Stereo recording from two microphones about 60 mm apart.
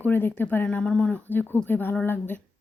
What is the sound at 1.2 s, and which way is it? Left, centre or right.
A woman's voice, left.